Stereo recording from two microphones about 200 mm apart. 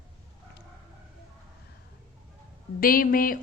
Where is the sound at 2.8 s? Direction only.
45° left (ahead or behind).